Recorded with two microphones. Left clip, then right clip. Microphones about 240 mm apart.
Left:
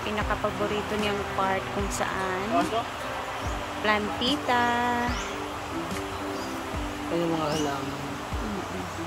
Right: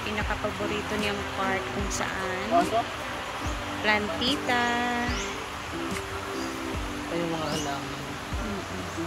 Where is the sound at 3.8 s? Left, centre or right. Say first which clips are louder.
Even; centre.